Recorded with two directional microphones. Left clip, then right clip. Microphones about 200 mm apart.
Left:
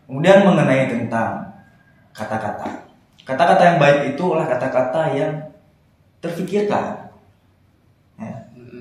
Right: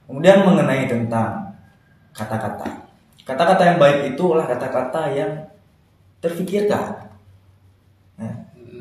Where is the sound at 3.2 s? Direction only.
35° right (ahead or behind).